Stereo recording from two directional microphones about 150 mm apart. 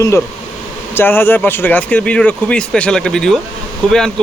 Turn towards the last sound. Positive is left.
turn(degrees=5)  # may be behind; listen again after turning